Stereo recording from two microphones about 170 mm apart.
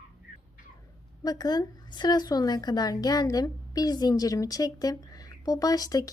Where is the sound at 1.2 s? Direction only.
25° left (ahead or behind).